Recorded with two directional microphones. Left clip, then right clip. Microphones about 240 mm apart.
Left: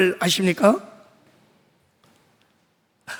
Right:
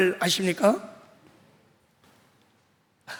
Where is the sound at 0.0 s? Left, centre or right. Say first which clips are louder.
Left 4 dB; centre.